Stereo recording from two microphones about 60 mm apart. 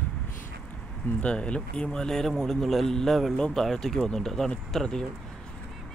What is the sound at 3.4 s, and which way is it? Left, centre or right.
A man's voice, centre.